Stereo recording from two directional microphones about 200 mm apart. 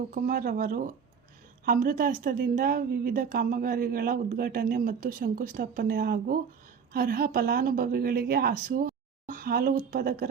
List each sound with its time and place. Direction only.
0.1 s a woman's voice: 45° right (ahead or behind)